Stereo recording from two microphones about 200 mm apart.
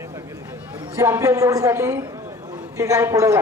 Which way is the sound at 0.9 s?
15° right (ahead or behind).